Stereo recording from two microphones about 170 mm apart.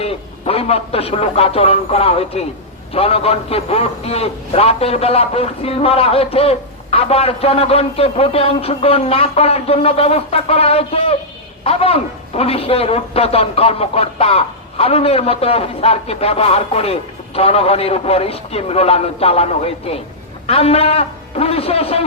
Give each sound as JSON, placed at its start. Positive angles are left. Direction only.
{"t": 0.0, "sound": "a man's voice", "side_deg": 35}